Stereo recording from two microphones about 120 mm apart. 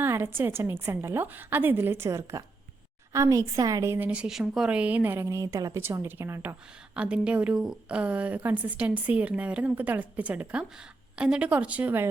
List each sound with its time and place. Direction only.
0.0 s a woman's voice: 20° right (ahead or behind)
6.9 s a woman's voice: 10° right (ahead or behind)